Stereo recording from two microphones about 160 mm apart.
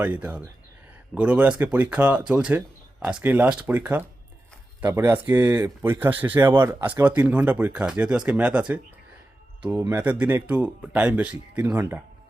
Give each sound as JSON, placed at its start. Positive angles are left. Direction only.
{"t": 0.0, "sound": "speech", "side_deg": -10}
{"t": 6.5, "sound": "speech", "side_deg": -25}
{"t": 7.0, "sound": "speech", "side_deg": -10}